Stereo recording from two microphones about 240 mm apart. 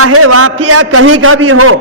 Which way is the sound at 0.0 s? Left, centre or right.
Right.